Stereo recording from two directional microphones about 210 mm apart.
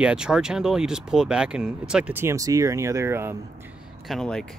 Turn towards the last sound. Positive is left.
turn(degrees=0)  # may be behind; listen again after turning